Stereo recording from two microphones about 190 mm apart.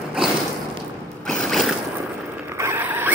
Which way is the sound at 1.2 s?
5° left (ahead or behind).